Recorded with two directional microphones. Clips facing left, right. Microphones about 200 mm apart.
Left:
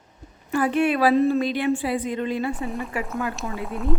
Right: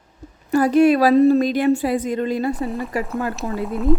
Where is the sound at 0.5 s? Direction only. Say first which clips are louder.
Right 7 dB; 40° right (ahead or behind).